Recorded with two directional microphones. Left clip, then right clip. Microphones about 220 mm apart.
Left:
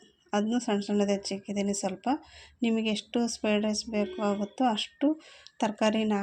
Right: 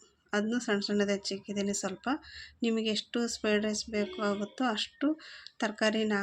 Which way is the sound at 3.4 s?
10° left (ahead or behind).